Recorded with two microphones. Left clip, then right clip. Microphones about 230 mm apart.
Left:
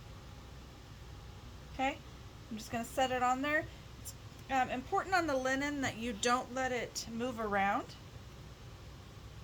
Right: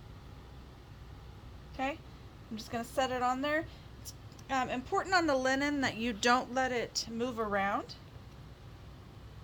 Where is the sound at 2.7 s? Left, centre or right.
Right.